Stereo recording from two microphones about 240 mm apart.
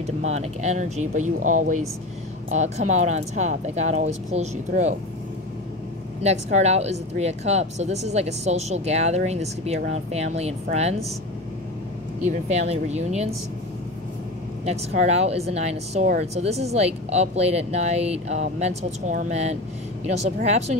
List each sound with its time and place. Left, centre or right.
0.0 s speech: right
6.2 s speech: right
12.3 s speech: right
14.6 s speech: right